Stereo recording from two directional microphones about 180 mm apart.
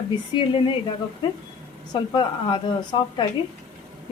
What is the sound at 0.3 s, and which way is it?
Speech, 25° left (ahead or behind).